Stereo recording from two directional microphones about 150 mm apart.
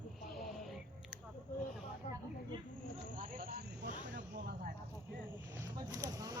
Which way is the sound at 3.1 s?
65° right (ahead or behind).